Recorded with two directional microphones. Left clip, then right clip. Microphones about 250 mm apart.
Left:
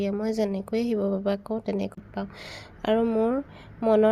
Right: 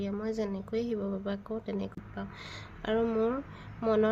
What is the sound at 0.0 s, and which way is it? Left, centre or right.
Speech, left.